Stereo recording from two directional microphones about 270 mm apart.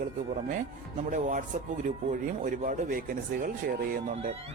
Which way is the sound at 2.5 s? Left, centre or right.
Right.